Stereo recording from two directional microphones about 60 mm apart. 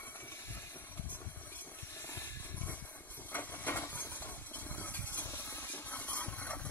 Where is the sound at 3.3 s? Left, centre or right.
Left.